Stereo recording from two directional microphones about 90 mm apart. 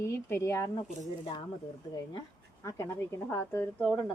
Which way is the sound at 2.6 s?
30° left (ahead or behind).